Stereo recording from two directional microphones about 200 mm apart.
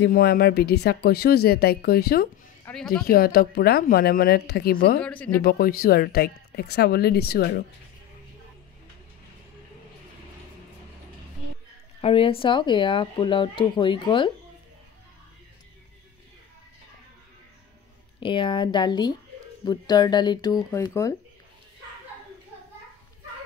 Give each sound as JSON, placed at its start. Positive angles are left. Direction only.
{"t": 0.0, "sound": "speech", "side_deg": 50}
{"t": 2.7, "sound": "speech", "side_deg": 10}
{"t": 3.1, "sound": "speech", "side_deg": 50}
{"t": 5.0, "sound": "speech", "side_deg": 5}
{"t": 5.4, "sound": "speech", "side_deg": 50}
{"t": 12.0, "sound": "speech", "side_deg": 30}
{"t": 18.2, "sound": "speech", "side_deg": 25}